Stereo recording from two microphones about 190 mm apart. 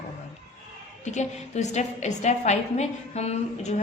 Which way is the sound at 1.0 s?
40° left (ahead or behind).